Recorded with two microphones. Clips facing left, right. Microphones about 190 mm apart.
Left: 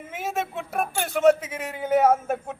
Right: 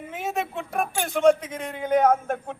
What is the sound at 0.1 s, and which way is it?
A man's voice, centre (ahead or behind).